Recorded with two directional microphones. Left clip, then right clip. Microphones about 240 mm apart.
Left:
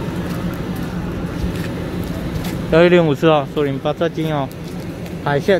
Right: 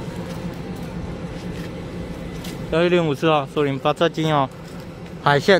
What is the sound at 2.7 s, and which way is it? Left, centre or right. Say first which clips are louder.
Speech: left 6 dB; centre.